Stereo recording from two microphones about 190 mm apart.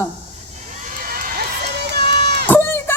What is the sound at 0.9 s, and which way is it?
Crowd, 50° right (ahead or behind).